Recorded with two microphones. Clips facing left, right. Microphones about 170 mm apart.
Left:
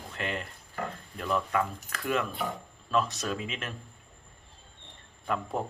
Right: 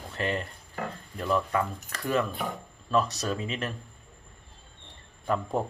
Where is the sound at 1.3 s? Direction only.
Centre (ahead or behind).